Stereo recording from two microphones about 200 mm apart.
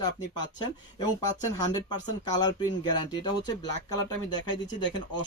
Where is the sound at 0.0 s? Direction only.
20° left (ahead or behind).